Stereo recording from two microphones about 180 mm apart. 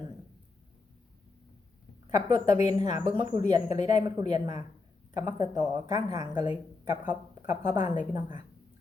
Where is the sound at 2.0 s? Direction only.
25° right (ahead or behind).